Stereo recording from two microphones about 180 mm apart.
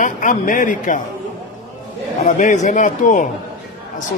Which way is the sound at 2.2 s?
40° left (ahead or behind).